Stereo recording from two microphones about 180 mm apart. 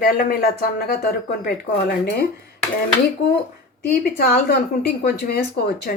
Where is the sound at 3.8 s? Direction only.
55° left (ahead or behind).